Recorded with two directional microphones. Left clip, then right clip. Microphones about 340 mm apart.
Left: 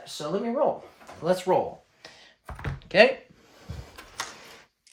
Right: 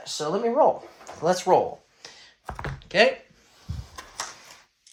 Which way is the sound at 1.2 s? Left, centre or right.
Centre.